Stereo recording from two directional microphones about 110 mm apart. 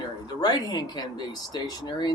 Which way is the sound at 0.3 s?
35° left (ahead or behind).